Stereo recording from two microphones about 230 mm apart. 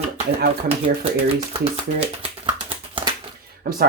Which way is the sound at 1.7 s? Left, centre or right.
Right.